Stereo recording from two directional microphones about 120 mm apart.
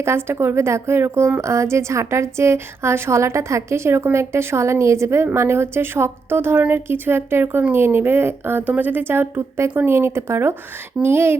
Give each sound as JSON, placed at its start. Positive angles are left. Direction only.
{"t": 0.0, "sound": "a woman's voice", "side_deg": -20}